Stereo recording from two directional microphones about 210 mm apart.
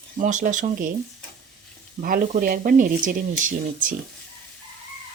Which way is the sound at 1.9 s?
40° right (ahead or behind).